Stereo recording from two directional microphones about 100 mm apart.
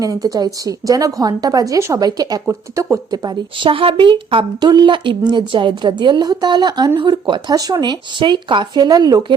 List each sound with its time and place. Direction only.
0.0 s speech: 35° right (ahead or behind)
3.1 s a woman's voice: 45° right (ahead or behind)
3.7 s a woman's voice: 60° right (ahead or behind); by 9.2 s 40° right (ahead or behind)